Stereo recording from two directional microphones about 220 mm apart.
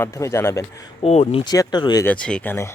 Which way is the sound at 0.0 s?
15° left (ahead or behind).